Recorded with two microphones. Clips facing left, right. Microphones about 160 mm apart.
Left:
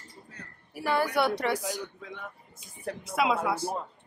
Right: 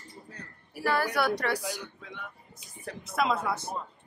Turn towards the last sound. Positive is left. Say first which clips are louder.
# left 2 dB
turn(degrees=10)  # may be behind; listen again after turning